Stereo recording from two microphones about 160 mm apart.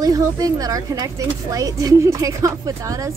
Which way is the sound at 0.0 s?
20° right (ahead or behind).